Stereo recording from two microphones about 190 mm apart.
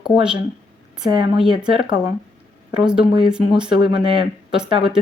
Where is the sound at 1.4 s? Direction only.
5° right (ahead or behind).